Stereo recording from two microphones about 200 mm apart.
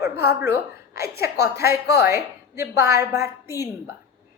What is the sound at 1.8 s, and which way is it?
Speech, 55° left (ahead or behind).